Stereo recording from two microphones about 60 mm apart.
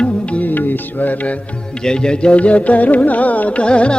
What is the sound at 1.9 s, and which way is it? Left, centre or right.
Music, centre.